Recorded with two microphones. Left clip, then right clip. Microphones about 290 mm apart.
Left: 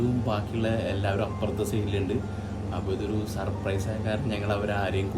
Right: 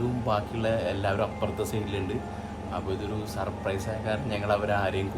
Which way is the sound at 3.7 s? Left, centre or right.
Centre.